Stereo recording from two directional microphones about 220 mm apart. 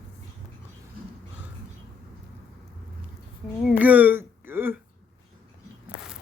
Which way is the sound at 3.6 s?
5° right (ahead or behind).